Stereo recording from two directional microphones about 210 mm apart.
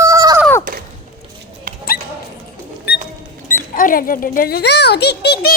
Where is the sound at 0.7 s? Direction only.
40° right (ahead or behind).